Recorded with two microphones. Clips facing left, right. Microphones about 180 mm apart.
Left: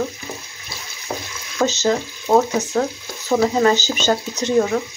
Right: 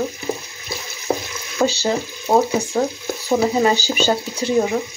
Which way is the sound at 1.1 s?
45° right (ahead or behind).